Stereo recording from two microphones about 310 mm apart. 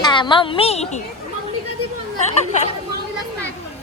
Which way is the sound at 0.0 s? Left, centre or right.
Centre.